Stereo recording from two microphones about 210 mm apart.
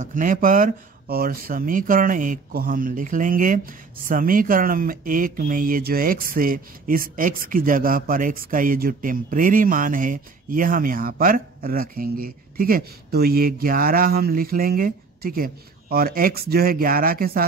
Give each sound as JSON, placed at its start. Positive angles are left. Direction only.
{"t": 0.0, "sound": "speech", "side_deg": -40}